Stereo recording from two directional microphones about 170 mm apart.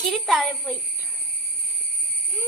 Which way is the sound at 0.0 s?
5° left (ahead or behind).